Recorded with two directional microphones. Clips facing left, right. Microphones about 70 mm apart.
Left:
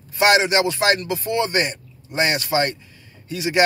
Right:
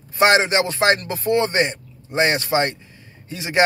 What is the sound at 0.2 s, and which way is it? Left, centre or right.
A man's voice, right.